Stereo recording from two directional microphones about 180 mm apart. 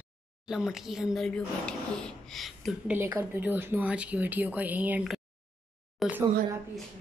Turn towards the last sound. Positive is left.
turn(degrees=-10)  # may be behind; listen again after turning